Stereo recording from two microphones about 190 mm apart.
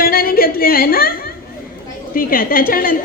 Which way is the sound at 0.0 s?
50° left (ahead or behind).